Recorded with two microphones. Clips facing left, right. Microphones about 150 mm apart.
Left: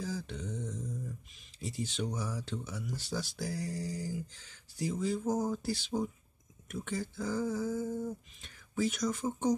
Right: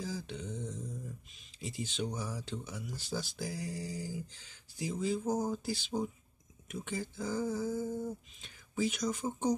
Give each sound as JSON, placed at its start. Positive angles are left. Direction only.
{"t": 0.0, "sound": "a sound", "side_deg": 0}
{"t": 1.6, "sound": "speech", "side_deg": 0}
{"t": 5.3, "sound": "speech", "side_deg": -10}
{"t": 5.7, "sound": "speech", "side_deg": 0}
{"t": 8.4, "sound": "speech", "side_deg": 0}